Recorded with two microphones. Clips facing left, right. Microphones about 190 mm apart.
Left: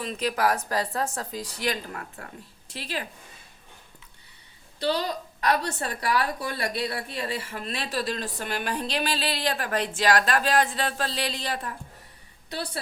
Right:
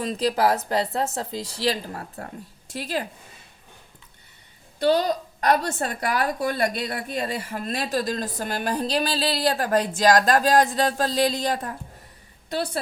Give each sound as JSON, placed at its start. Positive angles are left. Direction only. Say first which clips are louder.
{"t": 0.0, "sound": "speech", "louder": "right 4 dB", "side_deg": -35}
{"t": 4.8, "sound": "speech", "louder": "right 6 dB", "side_deg": -45}